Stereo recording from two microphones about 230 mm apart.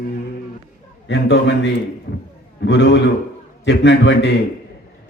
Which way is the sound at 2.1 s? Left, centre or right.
Left.